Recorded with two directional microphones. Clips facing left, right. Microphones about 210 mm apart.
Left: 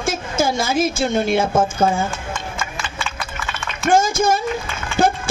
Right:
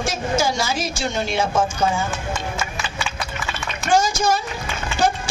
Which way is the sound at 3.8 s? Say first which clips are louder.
Left 3 dB; 55° left (ahead or behind).